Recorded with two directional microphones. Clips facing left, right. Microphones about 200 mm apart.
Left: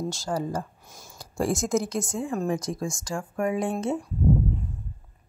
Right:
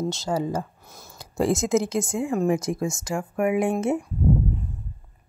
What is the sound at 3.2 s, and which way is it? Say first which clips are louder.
Speech: right 4 dB; 10° right (ahead or behind).